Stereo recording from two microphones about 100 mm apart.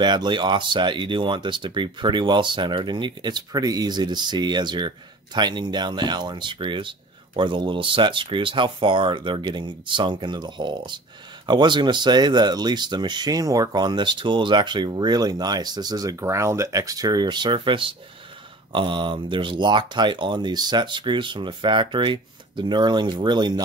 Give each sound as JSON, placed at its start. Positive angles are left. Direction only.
{"t": 0.0, "sound": "speech", "side_deg": -50}